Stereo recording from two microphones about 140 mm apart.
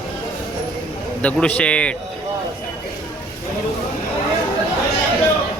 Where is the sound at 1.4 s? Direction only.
10° left (ahead or behind).